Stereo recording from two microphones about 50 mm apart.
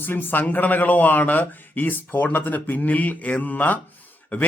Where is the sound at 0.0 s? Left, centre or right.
Left.